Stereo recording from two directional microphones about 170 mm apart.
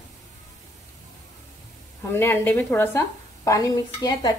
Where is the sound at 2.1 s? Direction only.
15° left (ahead or behind).